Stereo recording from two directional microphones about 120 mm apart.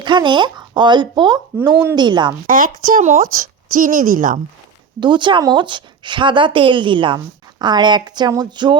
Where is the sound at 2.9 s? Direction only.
90° right.